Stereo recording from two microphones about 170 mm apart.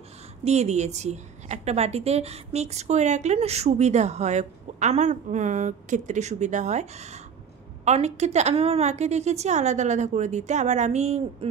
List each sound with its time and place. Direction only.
0.4 s a woman's voice: 40° right (ahead or behind)